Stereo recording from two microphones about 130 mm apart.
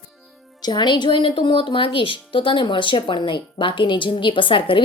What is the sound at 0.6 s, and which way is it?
Speech, 35° left (ahead or behind).